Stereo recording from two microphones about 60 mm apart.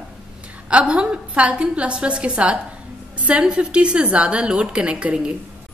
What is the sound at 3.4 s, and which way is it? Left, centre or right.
A woman's voice, centre.